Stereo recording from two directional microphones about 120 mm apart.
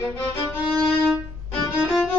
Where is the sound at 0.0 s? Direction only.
20° left (ahead or behind).